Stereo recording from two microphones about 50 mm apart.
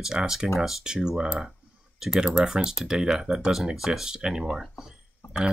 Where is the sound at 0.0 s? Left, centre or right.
Centre.